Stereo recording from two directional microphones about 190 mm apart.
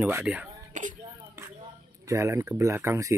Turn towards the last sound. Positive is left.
turn(degrees=-15)  # may be behind; listen again after turning